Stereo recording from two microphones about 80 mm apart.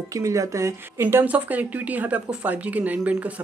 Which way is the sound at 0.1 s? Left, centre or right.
Right.